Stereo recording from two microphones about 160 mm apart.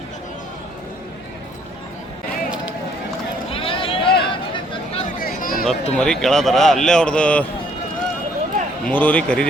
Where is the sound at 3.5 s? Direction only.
35° left (ahead or behind).